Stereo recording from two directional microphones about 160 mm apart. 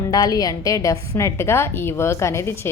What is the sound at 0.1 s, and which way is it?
A woman's voice, 25° left (ahead or behind).